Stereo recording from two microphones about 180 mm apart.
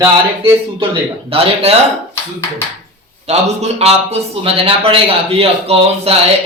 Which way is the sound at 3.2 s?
35° right (ahead or behind).